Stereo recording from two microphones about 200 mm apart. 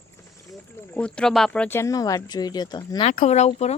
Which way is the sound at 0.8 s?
5° left (ahead or behind).